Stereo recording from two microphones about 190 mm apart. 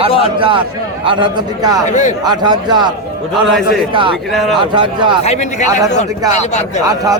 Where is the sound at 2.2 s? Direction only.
20° right (ahead or behind).